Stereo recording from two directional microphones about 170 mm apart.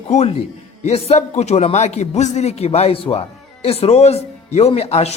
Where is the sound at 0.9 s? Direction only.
40° left (ahead or behind).